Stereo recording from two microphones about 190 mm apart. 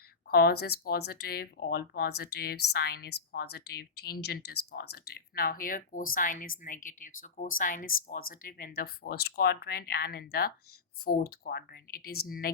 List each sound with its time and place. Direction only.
0.3 s speech: 55° left (ahead or behind)